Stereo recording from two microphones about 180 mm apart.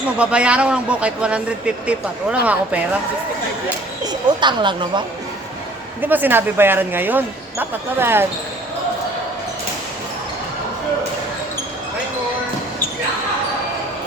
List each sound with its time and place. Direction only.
0.2 s speech: 5° right (ahead or behind)
4.0 s speech: 25° right (ahead or behind)
6.0 s speech: 10° right (ahead or behind)